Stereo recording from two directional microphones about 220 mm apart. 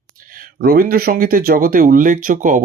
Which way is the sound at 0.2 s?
40° right (ahead or behind).